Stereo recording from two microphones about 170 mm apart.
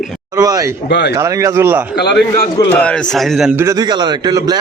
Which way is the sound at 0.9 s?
85° left.